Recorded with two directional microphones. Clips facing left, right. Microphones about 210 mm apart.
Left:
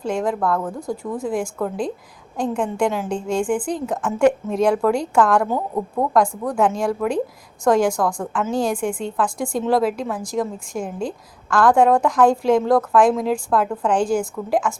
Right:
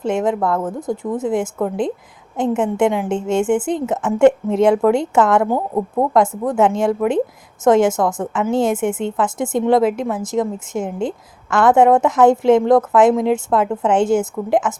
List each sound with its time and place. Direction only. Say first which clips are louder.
0.0 s a woman's voice: right 3 dB; 20° right (ahead or behind)